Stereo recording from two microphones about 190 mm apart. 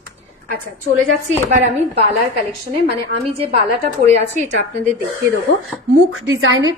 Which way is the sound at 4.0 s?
35° right (ahead or behind).